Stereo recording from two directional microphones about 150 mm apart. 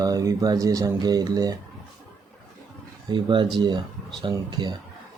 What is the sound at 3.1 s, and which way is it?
Speech, 30° right (ahead or behind).